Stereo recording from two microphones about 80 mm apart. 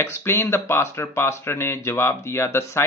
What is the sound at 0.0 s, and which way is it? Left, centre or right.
Speech, left.